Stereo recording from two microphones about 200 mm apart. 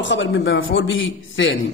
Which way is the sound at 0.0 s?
65° left (ahead or behind).